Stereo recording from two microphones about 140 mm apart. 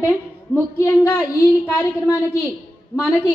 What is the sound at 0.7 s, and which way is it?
A woman's voice, 20° left (ahead or behind).